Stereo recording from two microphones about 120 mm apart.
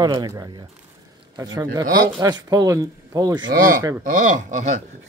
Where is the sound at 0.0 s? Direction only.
35° right (ahead or behind).